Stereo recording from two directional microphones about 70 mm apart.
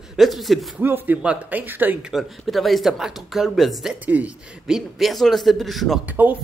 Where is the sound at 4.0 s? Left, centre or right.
Right.